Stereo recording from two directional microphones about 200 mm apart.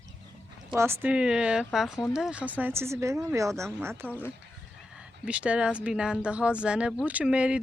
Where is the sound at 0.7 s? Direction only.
10° right (ahead or behind).